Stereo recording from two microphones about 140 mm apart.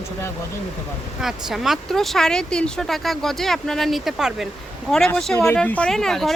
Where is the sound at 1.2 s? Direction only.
5° right (ahead or behind).